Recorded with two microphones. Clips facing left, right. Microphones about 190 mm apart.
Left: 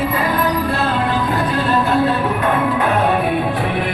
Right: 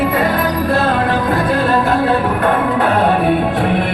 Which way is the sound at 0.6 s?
55° right (ahead or behind).